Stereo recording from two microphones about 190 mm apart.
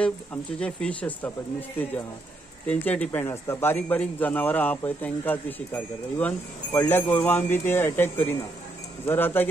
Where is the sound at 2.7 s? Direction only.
10° left (ahead or behind).